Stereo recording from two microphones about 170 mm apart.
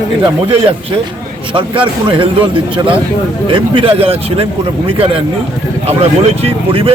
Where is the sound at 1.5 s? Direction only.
30° right (ahead or behind).